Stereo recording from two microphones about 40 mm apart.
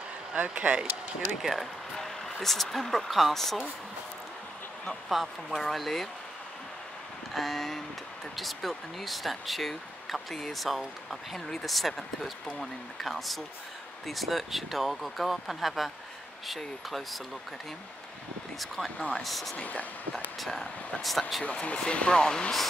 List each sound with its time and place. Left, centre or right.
0.3 s speech: right
1.4 s speech: centre
2.0 s vehicle: centre
2.4 s speech: centre
5.5 s speech: centre
7.3 s speech: centre
11.3 s speech: centre
11.6 s speech: centre
18.9 s speech: left
19.2 s speech: centre
19.5 s speech: left
20.3 s speech: centre
21.5 s speech: left